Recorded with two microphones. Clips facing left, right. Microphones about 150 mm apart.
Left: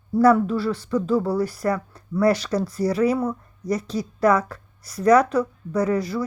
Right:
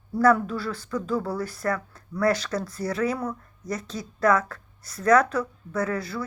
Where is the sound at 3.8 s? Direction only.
35° left (ahead or behind).